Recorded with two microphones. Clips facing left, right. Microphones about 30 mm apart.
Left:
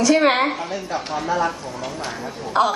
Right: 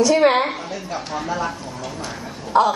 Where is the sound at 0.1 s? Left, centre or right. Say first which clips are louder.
Right 1 dB; centre.